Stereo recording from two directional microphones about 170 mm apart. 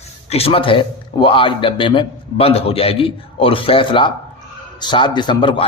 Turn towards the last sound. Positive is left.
turn(degrees=30)  # may be behind; listen again after turning